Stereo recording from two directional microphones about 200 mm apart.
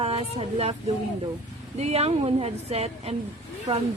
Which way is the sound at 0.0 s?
30° right (ahead or behind).